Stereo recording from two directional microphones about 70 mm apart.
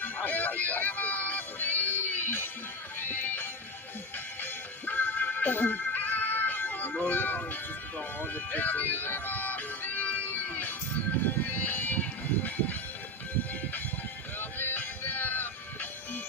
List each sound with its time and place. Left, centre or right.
0.0 s music: left
14.4 s music: left